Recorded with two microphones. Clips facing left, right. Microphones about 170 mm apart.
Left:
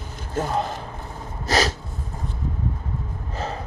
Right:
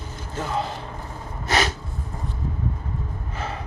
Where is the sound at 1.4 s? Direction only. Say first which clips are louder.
Left 1 dB; 35° left (ahead or behind).